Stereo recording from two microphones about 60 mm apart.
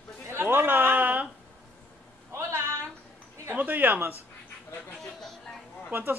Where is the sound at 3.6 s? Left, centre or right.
Right.